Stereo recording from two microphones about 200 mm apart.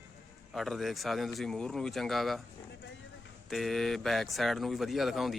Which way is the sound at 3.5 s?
Centre (ahead or behind).